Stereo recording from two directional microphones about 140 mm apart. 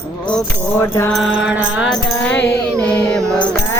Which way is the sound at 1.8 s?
5° left (ahead or behind).